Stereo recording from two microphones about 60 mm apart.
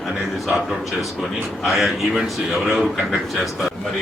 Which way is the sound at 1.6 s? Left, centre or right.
Centre.